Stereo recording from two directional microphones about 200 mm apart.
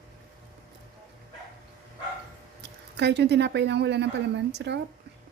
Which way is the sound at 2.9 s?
60° right (ahead or behind).